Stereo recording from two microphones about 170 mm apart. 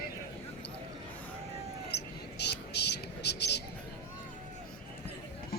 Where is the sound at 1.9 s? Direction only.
80° left.